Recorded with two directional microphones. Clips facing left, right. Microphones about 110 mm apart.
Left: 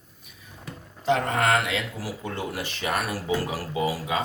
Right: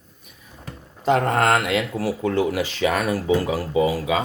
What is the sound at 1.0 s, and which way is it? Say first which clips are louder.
Speech: right 4 dB; 55° right (ahead or behind).